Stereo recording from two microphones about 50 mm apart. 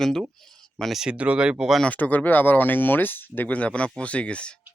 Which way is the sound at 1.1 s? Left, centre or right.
Right.